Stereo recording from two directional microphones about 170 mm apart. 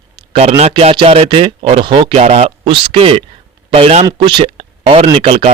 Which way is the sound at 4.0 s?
25° right (ahead or behind).